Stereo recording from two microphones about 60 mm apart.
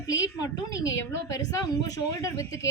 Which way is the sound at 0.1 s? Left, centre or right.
Left.